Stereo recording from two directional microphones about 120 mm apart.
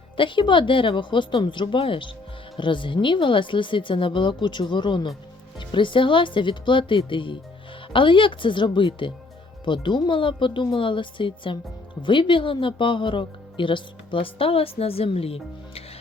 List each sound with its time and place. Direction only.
0.2 s speech: 45° left (ahead or behind)